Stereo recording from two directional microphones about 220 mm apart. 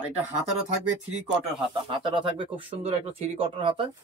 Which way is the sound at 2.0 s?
20° right (ahead or behind).